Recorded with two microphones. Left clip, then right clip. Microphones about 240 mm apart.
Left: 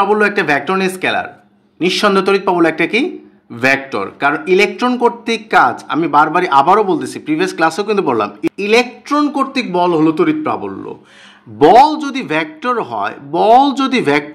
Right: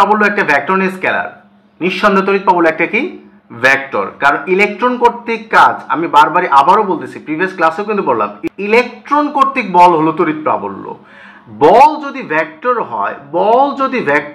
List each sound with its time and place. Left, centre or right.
0.2 s speech: left
12.0 s speech: left